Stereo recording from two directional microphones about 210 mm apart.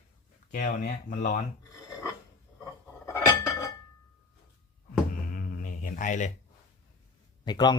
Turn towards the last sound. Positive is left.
turn(degrees=20)  # may be behind; listen again after turning